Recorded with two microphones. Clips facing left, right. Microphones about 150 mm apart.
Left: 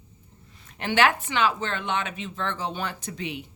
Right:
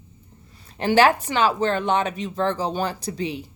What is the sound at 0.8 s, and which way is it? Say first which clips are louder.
Speech: right 5 dB; 35° right (ahead or behind).